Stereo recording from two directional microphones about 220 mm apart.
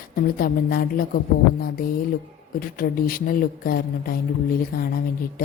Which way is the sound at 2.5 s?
40° left (ahead or behind).